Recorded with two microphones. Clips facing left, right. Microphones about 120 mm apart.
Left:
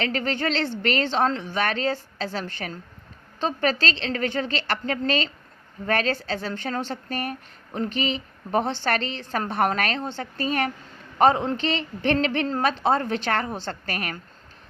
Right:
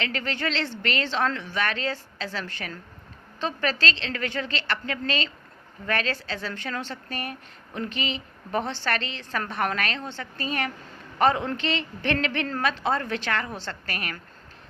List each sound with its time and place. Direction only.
0.0 s a woman's voice: 40° left (ahead or behind)